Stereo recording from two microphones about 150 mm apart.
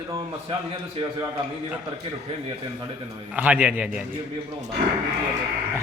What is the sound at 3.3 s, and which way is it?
Speech, 10° right (ahead or behind).